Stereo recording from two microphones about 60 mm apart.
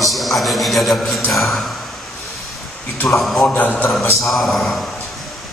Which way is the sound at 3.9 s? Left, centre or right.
Centre.